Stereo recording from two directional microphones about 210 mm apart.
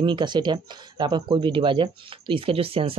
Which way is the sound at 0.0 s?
20° right (ahead or behind).